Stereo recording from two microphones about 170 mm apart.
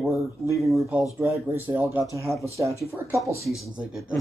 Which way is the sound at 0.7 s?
5° right (ahead or behind).